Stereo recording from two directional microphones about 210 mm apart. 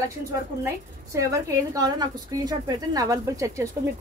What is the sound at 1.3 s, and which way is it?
A woman's voice, 15° right (ahead or behind).